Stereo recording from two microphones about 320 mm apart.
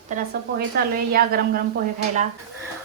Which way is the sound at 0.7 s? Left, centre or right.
Right.